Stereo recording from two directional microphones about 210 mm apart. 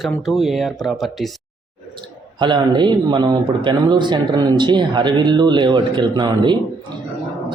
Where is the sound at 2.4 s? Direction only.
20° right (ahead or behind).